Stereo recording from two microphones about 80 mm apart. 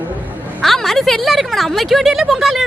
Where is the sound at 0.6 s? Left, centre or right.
Centre.